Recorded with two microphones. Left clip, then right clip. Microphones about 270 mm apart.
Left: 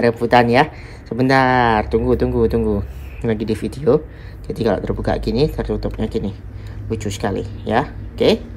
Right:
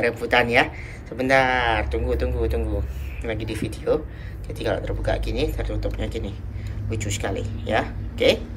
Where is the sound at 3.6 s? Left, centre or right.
Left.